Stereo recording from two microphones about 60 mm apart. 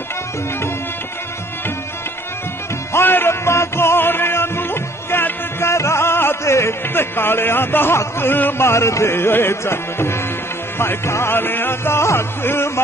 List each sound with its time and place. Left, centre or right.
2.9 s music: left
6.9 s speech: left
8.2 s music: left